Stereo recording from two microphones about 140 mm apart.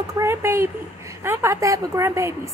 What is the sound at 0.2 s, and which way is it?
A woman's voice, 20° right (ahead or behind).